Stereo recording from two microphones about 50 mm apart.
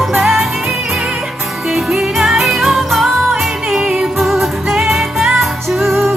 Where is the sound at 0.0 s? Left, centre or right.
Centre.